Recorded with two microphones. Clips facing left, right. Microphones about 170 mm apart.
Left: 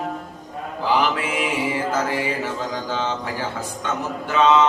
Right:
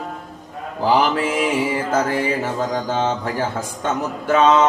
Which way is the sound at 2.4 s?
45° right (ahead or behind).